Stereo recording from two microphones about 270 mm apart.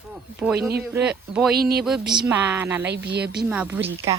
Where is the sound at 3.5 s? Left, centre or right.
Centre.